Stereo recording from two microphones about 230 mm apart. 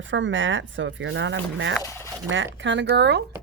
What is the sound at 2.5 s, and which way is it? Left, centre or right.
Speech, right.